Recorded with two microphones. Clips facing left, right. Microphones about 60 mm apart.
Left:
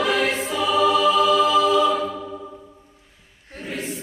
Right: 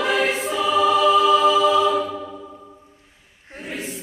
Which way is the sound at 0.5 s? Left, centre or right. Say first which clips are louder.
Right 1 dB; centre.